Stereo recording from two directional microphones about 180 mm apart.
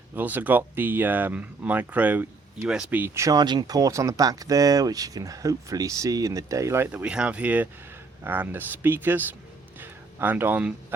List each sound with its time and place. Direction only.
0.1 s speech: 10° right (ahead or behind)